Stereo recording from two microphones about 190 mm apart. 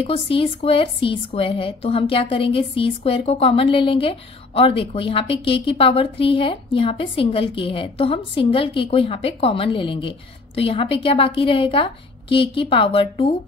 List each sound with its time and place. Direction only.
0.0 s a woman's voice: 30° left (ahead or behind)